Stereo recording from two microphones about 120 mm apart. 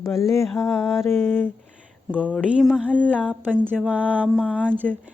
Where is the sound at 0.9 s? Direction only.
20° left (ahead or behind).